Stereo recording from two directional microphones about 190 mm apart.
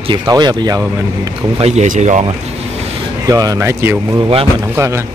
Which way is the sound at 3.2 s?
20° right (ahead or behind).